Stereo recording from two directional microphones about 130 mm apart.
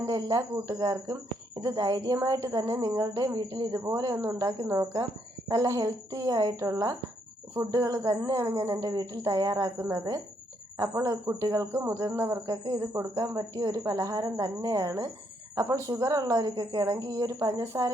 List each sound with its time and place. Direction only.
0.0 s speech: 25° right (ahead or behind)